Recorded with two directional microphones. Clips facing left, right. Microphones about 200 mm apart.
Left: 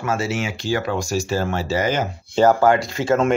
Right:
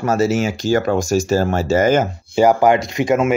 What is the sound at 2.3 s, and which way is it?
Speech, 15° right (ahead or behind).